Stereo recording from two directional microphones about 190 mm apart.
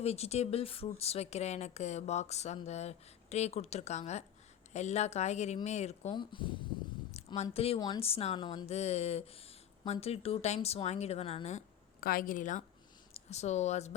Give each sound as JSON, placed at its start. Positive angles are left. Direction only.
{"t": 0.0, "sound": "speech", "side_deg": 35}
{"t": 6.1, "sound": "speech", "side_deg": 25}
{"t": 11.9, "sound": "a woman's voice", "side_deg": 50}